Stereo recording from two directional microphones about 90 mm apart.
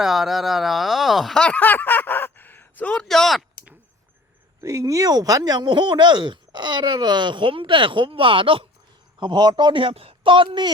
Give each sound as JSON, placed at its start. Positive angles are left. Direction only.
{"t": 0.0, "sound": "speech", "side_deg": 0}
{"t": 2.9, "sound": "speech", "side_deg": 5}
{"t": 4.6, "sound": "speech", "side_deg": -40}
{"t": 9.2, "sound": "a man's voice", "side_deg": -55}